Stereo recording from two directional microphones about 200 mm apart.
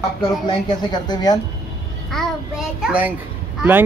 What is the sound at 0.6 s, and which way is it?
Speech, 20° left (ahead or behind).